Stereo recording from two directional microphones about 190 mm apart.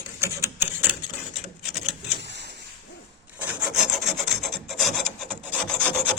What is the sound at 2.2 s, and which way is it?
Printer, 65° right (ahead or behind).